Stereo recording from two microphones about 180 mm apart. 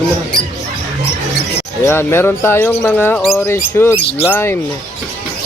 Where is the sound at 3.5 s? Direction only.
15° left (ahead or behind).